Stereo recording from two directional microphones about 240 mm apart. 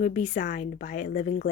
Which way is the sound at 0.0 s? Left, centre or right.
Left.